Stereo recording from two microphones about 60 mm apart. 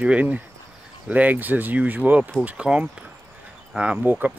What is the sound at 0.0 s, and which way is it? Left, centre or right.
Speech, right.